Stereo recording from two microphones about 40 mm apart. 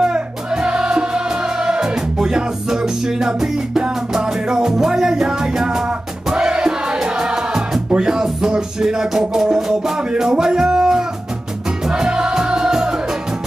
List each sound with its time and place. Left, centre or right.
0.0 s music: right
5.9 s music: right